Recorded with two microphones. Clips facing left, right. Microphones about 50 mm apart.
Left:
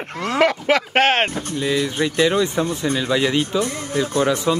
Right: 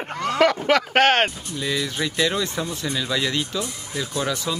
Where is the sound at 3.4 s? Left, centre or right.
Left.